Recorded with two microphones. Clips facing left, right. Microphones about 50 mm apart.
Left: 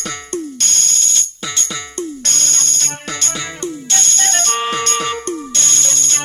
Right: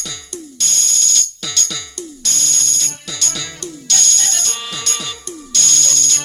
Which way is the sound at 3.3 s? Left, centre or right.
Left.